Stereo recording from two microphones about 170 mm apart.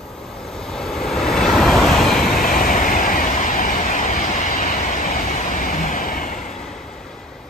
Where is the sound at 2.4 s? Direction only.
55° left (ahead or behind).